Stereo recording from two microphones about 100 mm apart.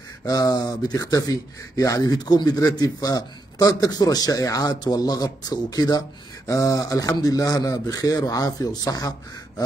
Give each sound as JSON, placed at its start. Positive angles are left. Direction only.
{"t": 0.2, "sound": "speech", "side_deg": 40}